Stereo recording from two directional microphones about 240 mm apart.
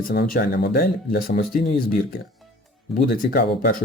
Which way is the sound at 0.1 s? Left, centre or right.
Left.